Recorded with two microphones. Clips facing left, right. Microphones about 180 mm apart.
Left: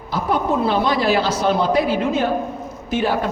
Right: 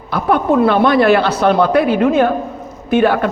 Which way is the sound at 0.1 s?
60° right (ahead or behind).